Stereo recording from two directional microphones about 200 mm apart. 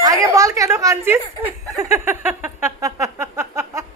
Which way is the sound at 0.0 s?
15° right (ahead or behind).